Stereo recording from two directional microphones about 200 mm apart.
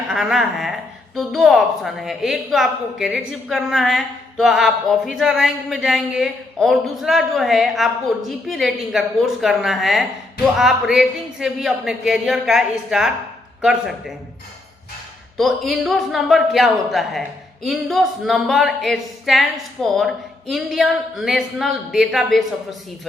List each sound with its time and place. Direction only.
0.1 s a woman's voice: centre (ahead or behind)
15.4 s a woman's voice: centre (ahead or behind)